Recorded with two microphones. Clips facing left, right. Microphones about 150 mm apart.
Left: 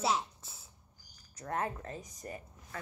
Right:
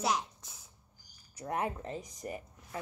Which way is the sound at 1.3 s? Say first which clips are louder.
Right 1 dB; 15° right (ahead or behind).